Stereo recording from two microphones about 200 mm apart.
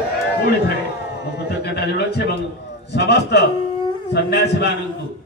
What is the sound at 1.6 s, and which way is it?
A man's voice, 55° left (ahead or behind).